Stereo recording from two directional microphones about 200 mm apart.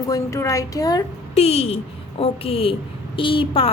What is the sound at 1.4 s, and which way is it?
A woman's voice, 30° left (ahead or behind).